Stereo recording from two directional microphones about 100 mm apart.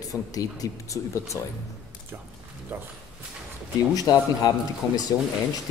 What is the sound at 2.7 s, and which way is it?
Speech, 20° right (ahead or behind).